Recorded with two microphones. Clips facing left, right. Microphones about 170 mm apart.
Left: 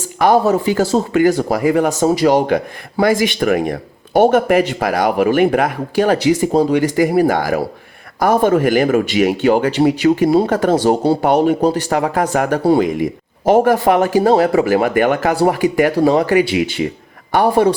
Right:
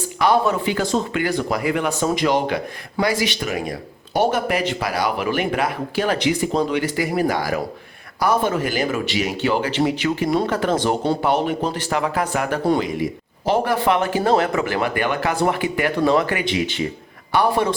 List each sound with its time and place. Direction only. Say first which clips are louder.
0.2 s a man's voice: left 5 dB; 40° left (ahead or behind)
10.8 s a man's voice: left 6 dB; 35° left (ahead or behind)